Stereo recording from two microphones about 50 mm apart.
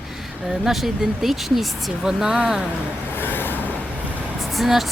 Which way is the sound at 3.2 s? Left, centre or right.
Left.